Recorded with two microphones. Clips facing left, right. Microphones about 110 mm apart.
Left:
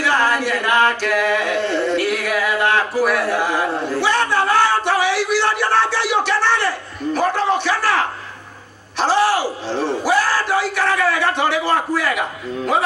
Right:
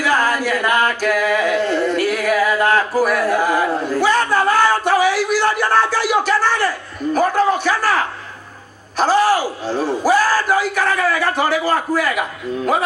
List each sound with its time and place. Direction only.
0.0 s singing: 45° right (ahead or behind)
4.8 s a sound: 45° right (ahead or behind)
8.9 s speech: 45° right (ahead or behind)